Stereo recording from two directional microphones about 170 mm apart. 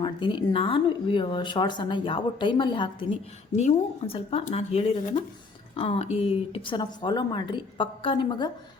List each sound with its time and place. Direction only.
0.0 s speech: 30° left (ahead or behind)
3.5 s speech: 40° left (ahead or behind); by 8.4 s 25° left (ahead or behind)